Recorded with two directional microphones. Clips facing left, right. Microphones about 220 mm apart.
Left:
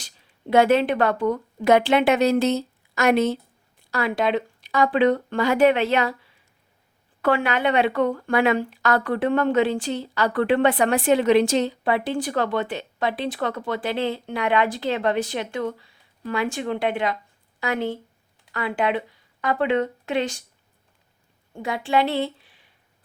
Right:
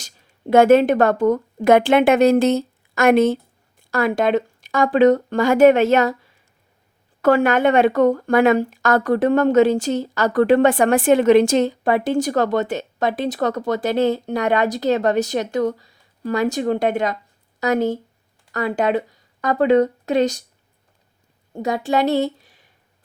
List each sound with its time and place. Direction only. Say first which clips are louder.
0.0 s speech: right 5 dB; 45° right (ahead or behind)
21.5 s a woman's voice: right 3 dB; 40° right (ahead or behind)